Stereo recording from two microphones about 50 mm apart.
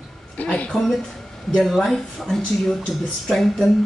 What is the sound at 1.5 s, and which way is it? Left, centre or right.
Speech, centre.